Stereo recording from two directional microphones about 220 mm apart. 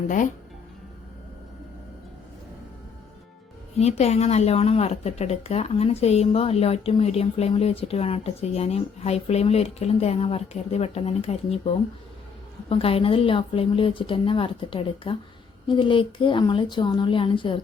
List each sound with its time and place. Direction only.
3.8 s speech: 30° left (ahead or behind)